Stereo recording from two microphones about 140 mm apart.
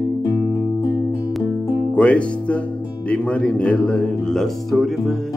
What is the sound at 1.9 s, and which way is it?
Speech, 10° left (ahead or behind).